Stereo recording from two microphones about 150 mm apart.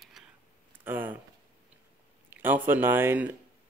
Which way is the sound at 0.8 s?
15° right (ahead or behind).